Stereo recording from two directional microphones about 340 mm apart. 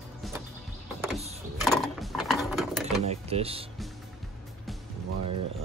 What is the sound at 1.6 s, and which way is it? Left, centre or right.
Mechanisms, centre.